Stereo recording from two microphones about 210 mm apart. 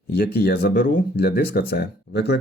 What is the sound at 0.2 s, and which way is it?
Speech, 45° left (ahead or behind).